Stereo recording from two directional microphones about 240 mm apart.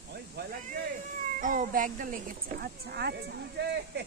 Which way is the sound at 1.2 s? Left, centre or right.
Right.